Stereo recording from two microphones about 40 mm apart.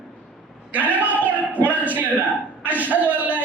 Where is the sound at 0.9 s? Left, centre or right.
Right.